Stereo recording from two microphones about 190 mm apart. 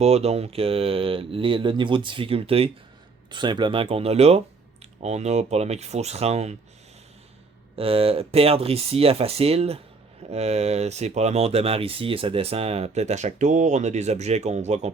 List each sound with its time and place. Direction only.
0.0 s speech: 35° right (ahead or behind)
7.8 s speech: 30° right (ahead or behind)